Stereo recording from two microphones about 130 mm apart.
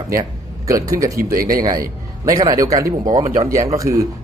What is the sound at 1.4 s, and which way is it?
Speech, 90° right.